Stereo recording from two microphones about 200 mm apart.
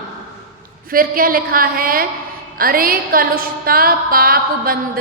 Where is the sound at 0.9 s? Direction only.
45° right (ahead or behind).